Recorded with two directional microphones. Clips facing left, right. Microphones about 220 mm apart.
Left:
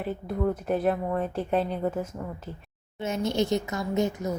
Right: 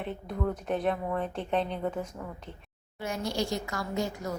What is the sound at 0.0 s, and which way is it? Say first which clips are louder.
Speech: left 5 dB; 5° left (ahead or behind).